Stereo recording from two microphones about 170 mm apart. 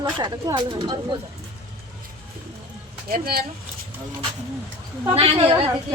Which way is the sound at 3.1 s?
65° right (ahead or behind).